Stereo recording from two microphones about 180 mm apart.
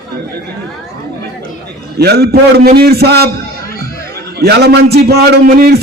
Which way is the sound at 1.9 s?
65° right (ahead or behind).